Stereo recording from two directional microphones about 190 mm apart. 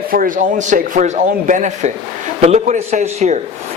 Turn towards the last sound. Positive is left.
turn(degrees=-35)  # may be behind; listen again after turning